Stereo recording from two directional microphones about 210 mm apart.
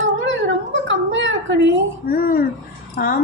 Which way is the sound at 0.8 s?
60° right (ahead or behind).